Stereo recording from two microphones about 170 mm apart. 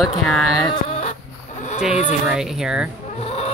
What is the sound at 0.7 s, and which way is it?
Chicken, 35° left (ahead or behind).